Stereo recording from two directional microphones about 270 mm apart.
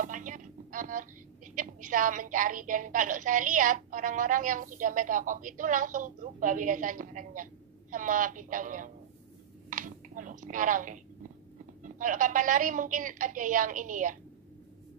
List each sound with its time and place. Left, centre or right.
0.0 s a woman's voice: right
9.7 s a sound: right
11.8 s a woman's voice: right